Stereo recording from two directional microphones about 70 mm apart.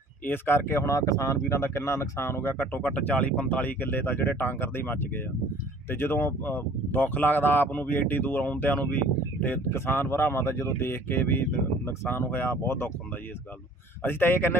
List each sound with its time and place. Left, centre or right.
0.2 s speech: left
14.0 s speech: left